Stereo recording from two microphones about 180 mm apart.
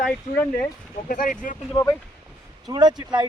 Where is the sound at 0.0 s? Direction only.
5° left (ahead or behind).